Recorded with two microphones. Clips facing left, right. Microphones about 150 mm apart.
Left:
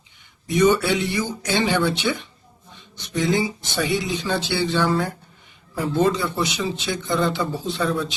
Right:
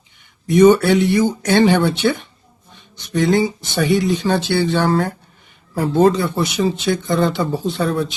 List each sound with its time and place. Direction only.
0.4 s speech: 50° right (ahead or behind)